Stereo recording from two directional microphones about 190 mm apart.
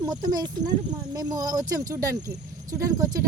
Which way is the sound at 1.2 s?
20° right (ahead or behind).